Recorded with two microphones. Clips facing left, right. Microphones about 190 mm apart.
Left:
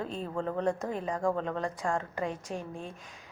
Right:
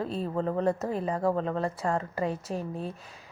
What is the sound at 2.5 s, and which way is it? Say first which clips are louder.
Speech: right 4 dB; 35° right (ahead or behind).